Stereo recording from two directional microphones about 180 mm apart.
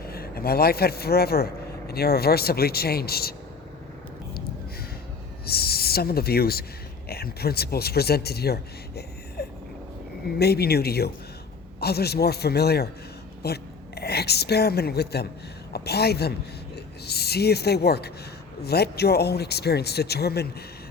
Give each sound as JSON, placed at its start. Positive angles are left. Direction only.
{"t": 0.0, "sound": "speech", "side_deg": 60}
{"t": 5.5, "sound": "speech", "side_deg": 60}
{"t": 9.4, "sound": "vehicle", "side_deg": 60}
{"t": 10.2, "sound": "a woman's voice", "side_deg": 60}
{"t": 16.7, "sound": "a sound", "side_deg": 65}
{"t": 18.6, "sound": "speech", "side_deg": 60}